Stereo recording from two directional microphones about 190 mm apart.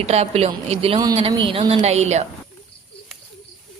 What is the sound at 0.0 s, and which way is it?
Speech, 35° right (ahead or behind).